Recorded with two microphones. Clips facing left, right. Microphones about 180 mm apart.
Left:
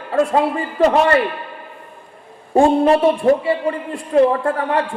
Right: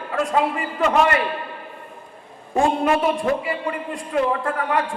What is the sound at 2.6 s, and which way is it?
A man's voice, 35° left (ahead or behind).